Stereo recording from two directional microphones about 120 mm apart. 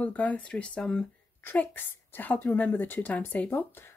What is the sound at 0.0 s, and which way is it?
A woman's voice, 10° left (ahead or behind).